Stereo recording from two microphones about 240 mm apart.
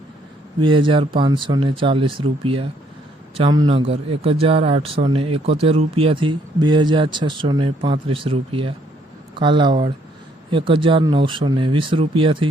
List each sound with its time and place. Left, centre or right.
0.6 s speech: centre